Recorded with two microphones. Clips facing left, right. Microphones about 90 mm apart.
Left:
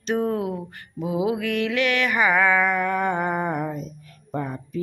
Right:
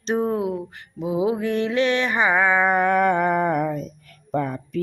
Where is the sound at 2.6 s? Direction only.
50° right (ahead or behind).